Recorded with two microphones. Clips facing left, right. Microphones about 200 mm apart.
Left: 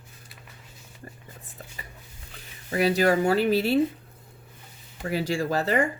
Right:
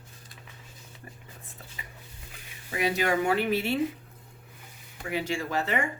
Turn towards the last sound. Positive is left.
turn(degrees=35)  # may be behind; listen again after turning